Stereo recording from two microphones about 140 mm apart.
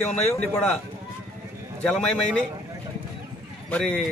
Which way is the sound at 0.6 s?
Centre (ahead or behind).